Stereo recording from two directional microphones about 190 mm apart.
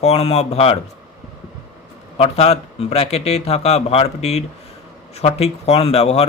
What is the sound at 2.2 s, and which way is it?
A man's voice, 30° left (ahead or behind).